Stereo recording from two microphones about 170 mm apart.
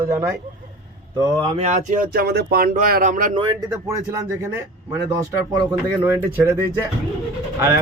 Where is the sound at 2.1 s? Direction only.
70° right (ahead or behind); by 3.3 s 50° right (ahead or behind).